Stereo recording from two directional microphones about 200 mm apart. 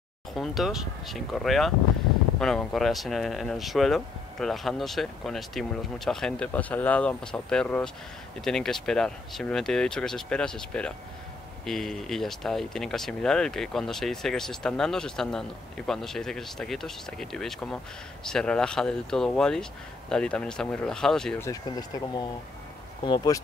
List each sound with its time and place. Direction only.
0.3 s speech: centre (ahead or behind)
21.5 s speech: 20° left (ahead or behind)